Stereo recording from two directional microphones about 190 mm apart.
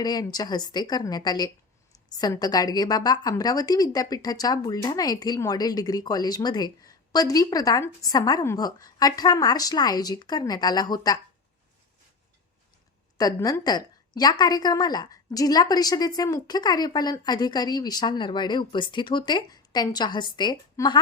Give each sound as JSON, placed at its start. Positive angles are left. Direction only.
{"t": 0.0, "sound": "a woman's voice", "side_deg": 20}
{"t": 13.1, "sound": "a woman's voice", "side_deg": 20}